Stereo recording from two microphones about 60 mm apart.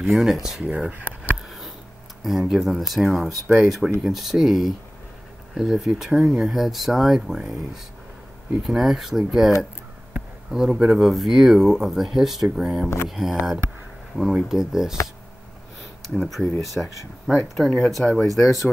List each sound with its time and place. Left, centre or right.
0.0 s speech: centre
0.7 s speech: right
2.2 s speech: centre
6.5 s speech: centre
10.5 s speech: centre
16.2 s speech: centre